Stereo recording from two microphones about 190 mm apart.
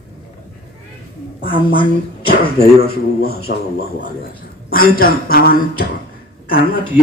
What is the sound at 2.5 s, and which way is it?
A man's voice, 55° left (ahead or behind).